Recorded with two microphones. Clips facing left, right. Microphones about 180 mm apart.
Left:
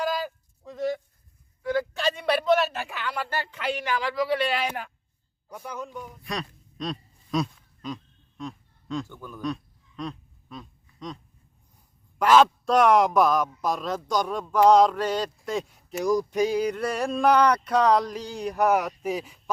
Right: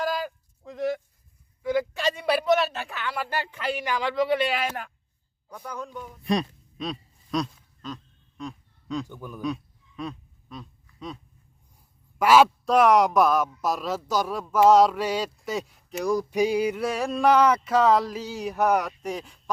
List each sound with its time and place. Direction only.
0.1 s a sound: 5° left (ahead or behind)
1.6 s a man's voice: 10° right (ahead or behind)
3.2 s a man's voice: 15° right (ahead or behind)
4.0 s speech: 25° right (ahead or behind)
4.4 s speech: centre (ahead or behind)
5.5 s speech: 10° left (ahead or behind)
6.7 s a sound: centre (ahead or behind)
9.0 s a man's voice: 15° right (ahead or behind)
9.4 s a sound: 5° right (ahead or behind)
12.2 s speech: 10° right (ahead or behind)